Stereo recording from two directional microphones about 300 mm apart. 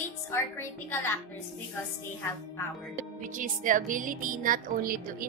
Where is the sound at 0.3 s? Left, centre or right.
Centre.